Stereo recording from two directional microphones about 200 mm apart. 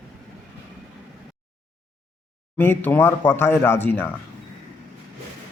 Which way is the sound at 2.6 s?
10° left (ahead or behind).